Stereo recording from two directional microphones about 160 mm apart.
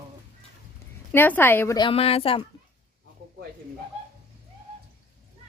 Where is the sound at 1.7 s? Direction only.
30° left (ahead or behind).